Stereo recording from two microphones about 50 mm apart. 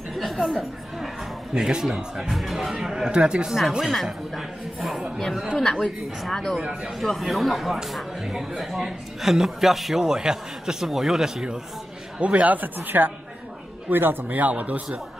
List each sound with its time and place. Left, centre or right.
0.1 s chatter: centre
1.5 s speech: centre
3.8 s speech: centre
6.6 s speech: centre
12.2 s speech: right